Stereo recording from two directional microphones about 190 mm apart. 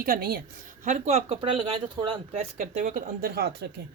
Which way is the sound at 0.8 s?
35° right (ahead or behind).